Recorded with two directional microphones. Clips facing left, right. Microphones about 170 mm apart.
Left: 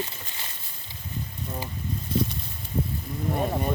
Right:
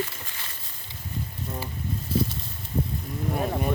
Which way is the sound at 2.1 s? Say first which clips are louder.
Even; 5° right (ahead or behind).